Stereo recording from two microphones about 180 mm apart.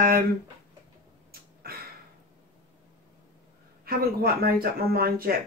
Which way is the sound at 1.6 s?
60° right (ahead or behind).